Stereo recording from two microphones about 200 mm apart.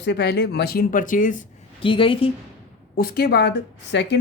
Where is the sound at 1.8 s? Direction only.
25° left (ahead or behind).